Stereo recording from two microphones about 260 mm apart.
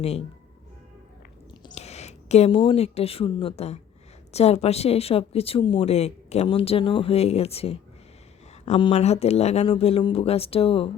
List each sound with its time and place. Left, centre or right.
1.6 s speech: left